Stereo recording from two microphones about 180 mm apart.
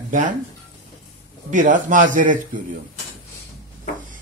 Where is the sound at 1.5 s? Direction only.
45° right (ahead or behind).